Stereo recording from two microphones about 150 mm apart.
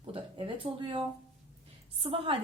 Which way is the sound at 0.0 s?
35° right (ahead or behind).